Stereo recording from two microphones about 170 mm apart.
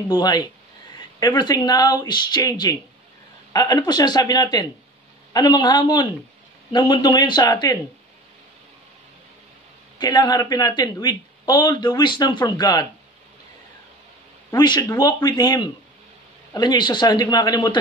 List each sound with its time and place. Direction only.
0.1 s speech: 25° left (ahead or behind)
9.9 s speech: 25° left (ahead or behind)
14.5 s speech: 25° left (ahead or behind)